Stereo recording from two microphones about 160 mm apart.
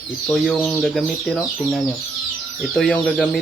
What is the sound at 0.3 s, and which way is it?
Speech, 10° left (ahead or behind).